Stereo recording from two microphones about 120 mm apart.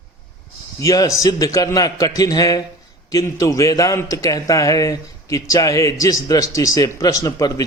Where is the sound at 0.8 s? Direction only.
30° left (ahead or behind).